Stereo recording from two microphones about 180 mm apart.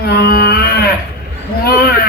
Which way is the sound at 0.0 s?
60° left (ahead or behind).